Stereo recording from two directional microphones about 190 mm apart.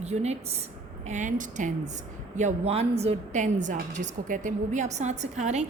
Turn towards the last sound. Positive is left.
turn(degrees=-35)  # may be behind; listen again after turning